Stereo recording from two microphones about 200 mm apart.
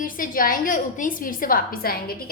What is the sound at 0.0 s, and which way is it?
A woman's voice, 45° left (ahead or behind).